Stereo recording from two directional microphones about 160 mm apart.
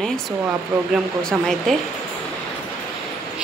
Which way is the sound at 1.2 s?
Centre (ahead or behind).